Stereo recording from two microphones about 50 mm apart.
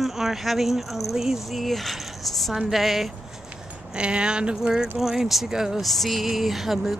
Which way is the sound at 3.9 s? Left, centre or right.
Centre.